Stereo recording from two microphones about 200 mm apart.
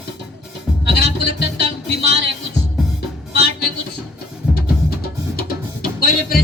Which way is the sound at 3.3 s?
55° left (ahead or behind).